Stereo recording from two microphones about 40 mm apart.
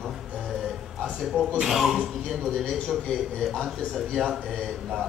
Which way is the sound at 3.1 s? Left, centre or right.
Left.